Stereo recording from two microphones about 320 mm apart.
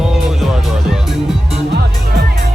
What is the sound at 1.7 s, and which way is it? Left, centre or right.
Music, right.